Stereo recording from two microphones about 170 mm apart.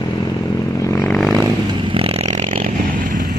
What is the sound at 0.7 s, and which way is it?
Vehicle, 15° left (ahead or behind).